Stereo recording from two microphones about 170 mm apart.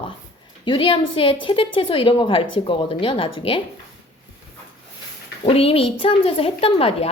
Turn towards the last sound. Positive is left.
turn(degrees=35)  # may be behind; listen again after turning